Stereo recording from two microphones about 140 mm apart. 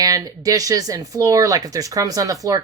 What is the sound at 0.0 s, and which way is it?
Speech, 25° right (ahead or behind).